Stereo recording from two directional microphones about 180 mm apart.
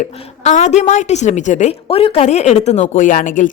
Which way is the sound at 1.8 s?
30° left (ahead or behind).